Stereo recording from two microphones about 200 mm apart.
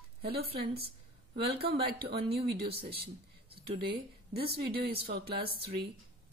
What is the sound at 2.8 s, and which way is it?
A woman's voice, 30° right (ahead or behind).